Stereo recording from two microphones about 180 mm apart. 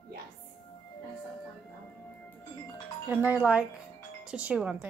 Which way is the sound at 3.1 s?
10° right (ahead or behind).